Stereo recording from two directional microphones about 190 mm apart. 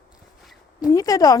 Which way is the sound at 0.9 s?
20° left (ahead or behind).